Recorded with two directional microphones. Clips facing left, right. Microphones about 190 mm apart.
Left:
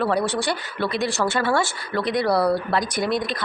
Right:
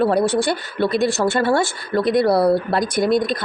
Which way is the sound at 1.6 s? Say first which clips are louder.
Right 4 dB; 50° right (ahead or behind).